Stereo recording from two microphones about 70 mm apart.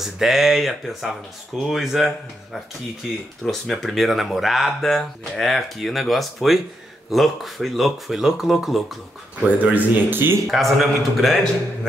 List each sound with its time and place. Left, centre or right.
0.0 s speech: centre
9.4 s speech: right
10.4 s speech: centre